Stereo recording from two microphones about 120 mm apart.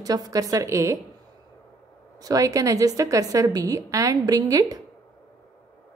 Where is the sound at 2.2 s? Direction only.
30° right (ahead or behind).